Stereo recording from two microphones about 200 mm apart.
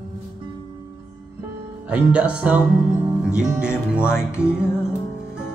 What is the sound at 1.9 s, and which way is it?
Speech, 5° right (ahead or behind).